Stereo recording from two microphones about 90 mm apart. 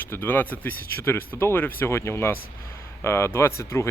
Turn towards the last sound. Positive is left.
turn(degrees=35)  # may be behind; listen again after turning